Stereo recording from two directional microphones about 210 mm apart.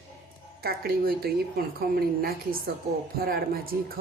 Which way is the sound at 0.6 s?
45° right (ahead or behind).